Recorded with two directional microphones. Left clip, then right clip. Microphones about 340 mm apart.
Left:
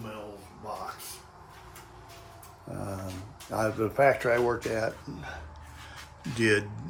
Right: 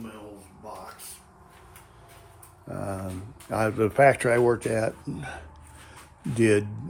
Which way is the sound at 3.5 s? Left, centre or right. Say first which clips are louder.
Right 4 dB; right.